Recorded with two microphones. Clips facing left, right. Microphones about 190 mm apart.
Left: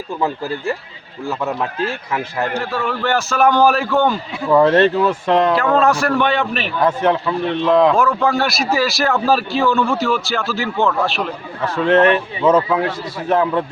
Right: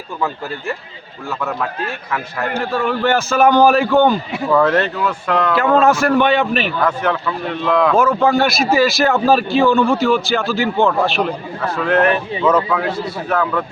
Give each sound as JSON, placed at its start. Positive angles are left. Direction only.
{"t": 2.7, "sound": "speech", "side_deg": 0}
{"t": 4.5, "sound": "speech", "side_deg": 25}
{"t": 5.5, "sound": "speech", "side_deg": 0}
{"t": 6.8, "sound": "speech", "side_deg": 25}
{"t": 7.9, "sound": "speech", "side_deg": 0}
{"t": 11.8, "sound": "speech", "side_deg": 25}